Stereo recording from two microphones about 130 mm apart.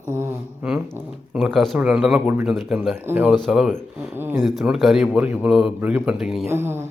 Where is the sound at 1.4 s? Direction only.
Centre (ahead or behind).